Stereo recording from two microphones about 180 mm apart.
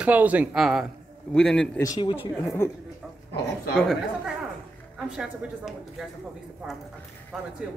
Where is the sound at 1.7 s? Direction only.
20° left (ahead or behind).